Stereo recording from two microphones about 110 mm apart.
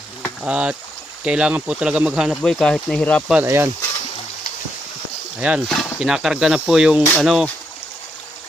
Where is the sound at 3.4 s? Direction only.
25° right (ahead or behind).